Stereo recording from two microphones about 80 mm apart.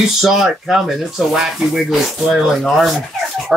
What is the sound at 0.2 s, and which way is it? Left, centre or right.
Speech, centre.